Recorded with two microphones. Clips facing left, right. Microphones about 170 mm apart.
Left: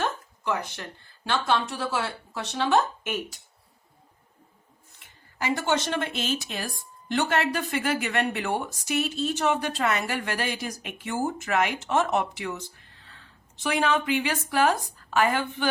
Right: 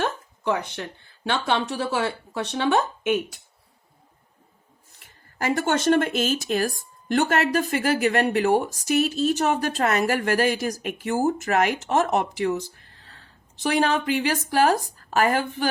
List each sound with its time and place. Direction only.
1.2 s speech: 60° right (ahead or behind)
4.9 s speech: 45° right (ahead or behind)